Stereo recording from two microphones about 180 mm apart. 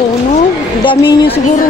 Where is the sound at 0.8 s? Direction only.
30° left (ahead or behind).